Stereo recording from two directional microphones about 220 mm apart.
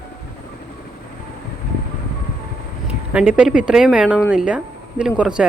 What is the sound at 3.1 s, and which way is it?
Speech, 5° right (ahead or behind).